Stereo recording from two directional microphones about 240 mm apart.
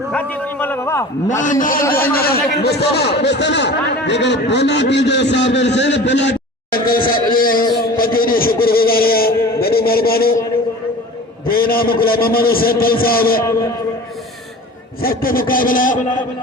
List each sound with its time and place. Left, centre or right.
0.1 s a sound: centre
1.3 s a man's voice: left
2.0 s a man's voice: centre
2.3 s a man's voice: left
7.9 s a sound: left
11.4 s a man's voice: left
15.0 s a man's voice: left